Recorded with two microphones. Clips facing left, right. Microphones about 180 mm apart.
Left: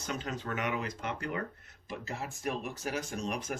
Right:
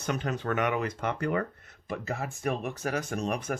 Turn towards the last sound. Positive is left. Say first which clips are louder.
# right 5 dB
turn(degrees=-60)  # may be behind; listen again after turning